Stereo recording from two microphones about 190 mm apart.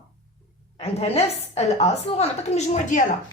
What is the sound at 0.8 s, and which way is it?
A woman's voice, 35° left (ahead or behind).